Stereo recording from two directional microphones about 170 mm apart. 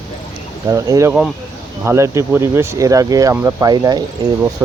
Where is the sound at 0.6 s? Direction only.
20° right (ahead or behind).